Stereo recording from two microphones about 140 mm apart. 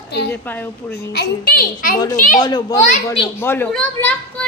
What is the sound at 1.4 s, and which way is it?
Speech, 90° left.